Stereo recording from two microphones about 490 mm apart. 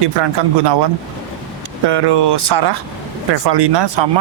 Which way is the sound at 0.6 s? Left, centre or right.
Right.